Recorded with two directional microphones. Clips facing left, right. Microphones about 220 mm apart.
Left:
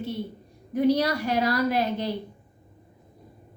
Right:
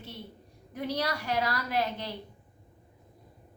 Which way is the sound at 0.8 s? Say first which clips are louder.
Left 9 dB; 15° left (ahead or behind).